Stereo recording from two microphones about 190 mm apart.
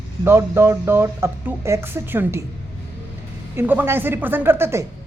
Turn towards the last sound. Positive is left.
turn(degrees=-15)  # may be behind; listen again after turning